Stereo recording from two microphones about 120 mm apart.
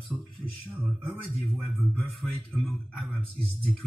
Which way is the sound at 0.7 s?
15° right (ahead or behind).